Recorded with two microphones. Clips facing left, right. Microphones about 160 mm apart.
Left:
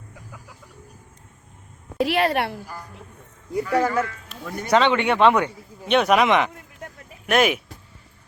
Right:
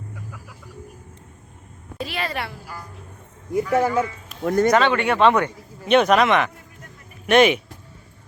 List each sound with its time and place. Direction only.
2.0 s a woman's voice: 65° left (ahead or behind)
3.7 s speech: 10° right (ahead or behind)
4.4 s speech: 65° right (ahead or behind)
4.8 s speech: 20° left (ahead or behind)
5.8 s speech: centre (ahead or behind)
6.1 s speech: 15° left (ahead or behind)
7.3 s speech: centre (ahead or behind)